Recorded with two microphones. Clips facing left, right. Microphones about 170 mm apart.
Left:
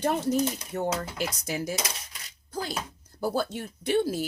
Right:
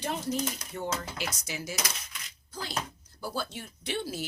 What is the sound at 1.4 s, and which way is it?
Speech, 45° left (ahead or behind).